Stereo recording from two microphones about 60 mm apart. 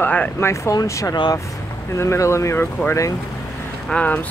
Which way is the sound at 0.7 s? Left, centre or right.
Left.